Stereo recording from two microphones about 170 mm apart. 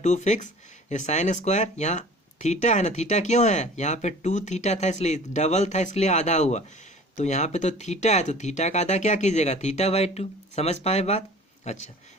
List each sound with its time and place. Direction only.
0.0 s speech: 45° left (ahead or behind)